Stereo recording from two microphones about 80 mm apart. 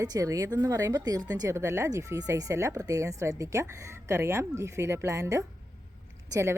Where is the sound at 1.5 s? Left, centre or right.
Right.